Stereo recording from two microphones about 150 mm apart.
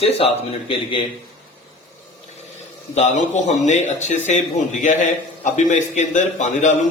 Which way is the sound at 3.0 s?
50° left (ahead or behind).